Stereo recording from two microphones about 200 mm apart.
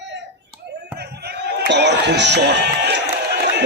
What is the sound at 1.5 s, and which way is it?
A man's voice, 55° right (ahead or behind).